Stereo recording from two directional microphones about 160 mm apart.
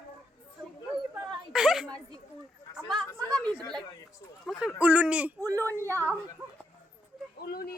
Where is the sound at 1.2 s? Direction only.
Centre (ahead or behind).